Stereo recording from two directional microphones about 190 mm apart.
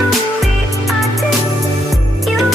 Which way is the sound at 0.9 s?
Centre (ahead or behind).